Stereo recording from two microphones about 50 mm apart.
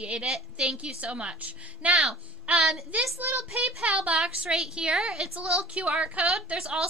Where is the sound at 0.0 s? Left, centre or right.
Right.